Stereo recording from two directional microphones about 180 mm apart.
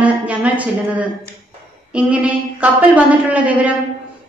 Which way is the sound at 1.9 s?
5° right (ahead or behind).